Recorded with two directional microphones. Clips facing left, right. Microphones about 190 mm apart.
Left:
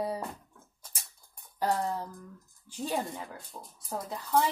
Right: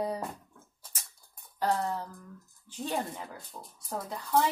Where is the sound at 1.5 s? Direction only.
15° left (ahead or behind).